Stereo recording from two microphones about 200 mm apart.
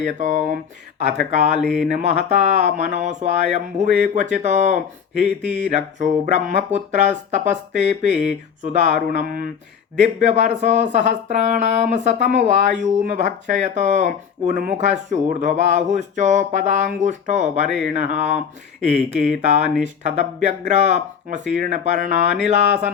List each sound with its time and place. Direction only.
0.0 s speech: 35° right (ahead or behind)
17.7 s speech: centre (ahead or behind)
17.9 s speech: 35° right (ahead or behind)